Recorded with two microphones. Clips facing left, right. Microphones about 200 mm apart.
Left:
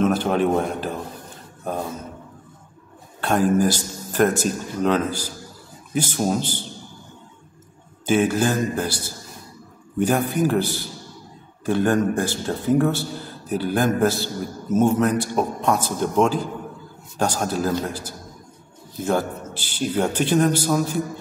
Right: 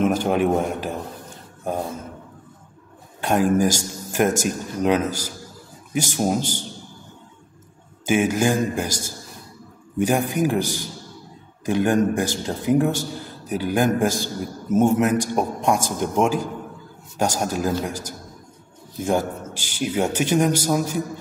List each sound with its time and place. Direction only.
0.0 s a man's voice: 10° right (ahead or behind)
3.2 s a man's voice: 10° right (ahead or behind)
8.0 s a man's voice: 10° right (ahead or behind)
9.9 s a man's voice: 10° right (ahead or behind)